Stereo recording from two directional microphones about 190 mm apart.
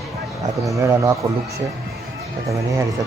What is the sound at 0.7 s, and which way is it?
Speech, 15° right (ahead or behind).